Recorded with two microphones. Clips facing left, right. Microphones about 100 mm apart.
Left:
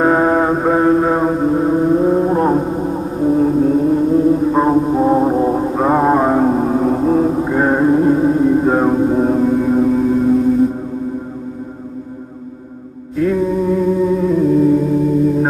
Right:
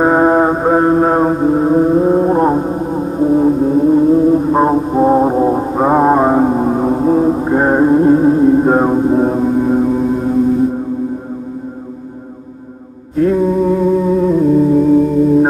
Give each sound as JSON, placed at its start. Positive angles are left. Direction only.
{"t": 0.0, "sound": "music", "side_deg": -5}
{"t": 0.7, "sound": "mantra", "side_deg": -30}
{"t": 1.2, "sound": "mantra", "side_deg": 0}
{"t": 3.2, "sound": "music", "side_deg": 0}
{"t": 13.4, "sound": "music", "side_deg": 0}